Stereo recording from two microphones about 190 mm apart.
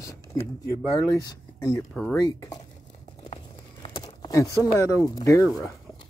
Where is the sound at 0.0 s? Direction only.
15° left (ahead or behind).